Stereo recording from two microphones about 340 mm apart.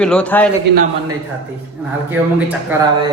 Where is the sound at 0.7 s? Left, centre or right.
Right.